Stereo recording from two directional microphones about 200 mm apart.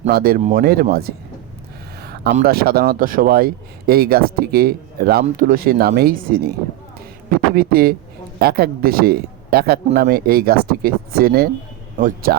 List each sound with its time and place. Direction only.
0.1 s speech: 50° right (ahead or behind)
2.0 s a sound: 50° right (ahead or behind)
2.3 s a man's voice: 50° right (ahead or behind)